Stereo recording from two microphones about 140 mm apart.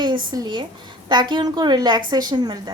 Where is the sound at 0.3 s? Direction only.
30° right (ahead or behind).